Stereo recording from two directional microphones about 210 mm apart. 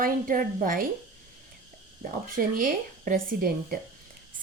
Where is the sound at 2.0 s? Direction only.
40° right (ahead or behind).